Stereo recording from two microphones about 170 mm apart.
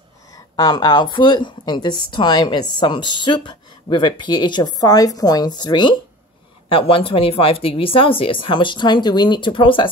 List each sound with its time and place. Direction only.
0.3 s speech: 25° left (ahead or behind)